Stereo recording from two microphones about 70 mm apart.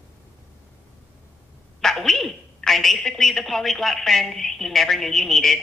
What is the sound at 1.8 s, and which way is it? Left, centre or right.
A woman's voice, centre.